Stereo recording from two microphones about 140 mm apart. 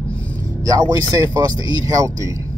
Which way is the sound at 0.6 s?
25° right (ahead or behind).